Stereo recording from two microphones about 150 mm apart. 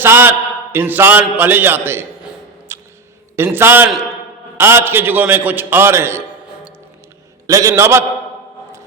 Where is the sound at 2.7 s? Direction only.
15° right (ahead or behind).